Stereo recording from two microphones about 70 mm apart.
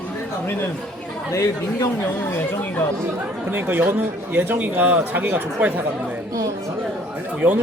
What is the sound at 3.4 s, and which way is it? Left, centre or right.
A man's voice, right.